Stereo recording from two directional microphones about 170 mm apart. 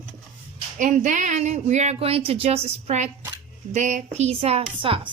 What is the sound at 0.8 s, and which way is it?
A woman's voice, 50° right (ahead or behind).